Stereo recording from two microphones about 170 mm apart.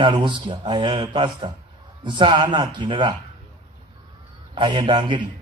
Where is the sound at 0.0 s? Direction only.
30° right (ahead or behind).